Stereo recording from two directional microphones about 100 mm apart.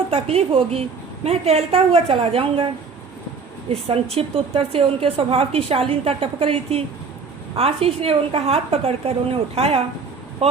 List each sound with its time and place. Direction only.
0.1 s a woman's voice: 85° right; by 2.6 s 70° right (ahead or behind)
3.7 s a woman's voice: 90° right; by 6.8 s 70° right (ahead or behind)
7.5 s a woman's voice: 85° right